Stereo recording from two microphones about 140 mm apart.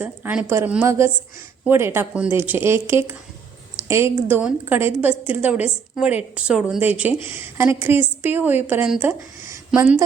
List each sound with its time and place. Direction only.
0.0 s a woman's voice: 10° right (ahead or behind)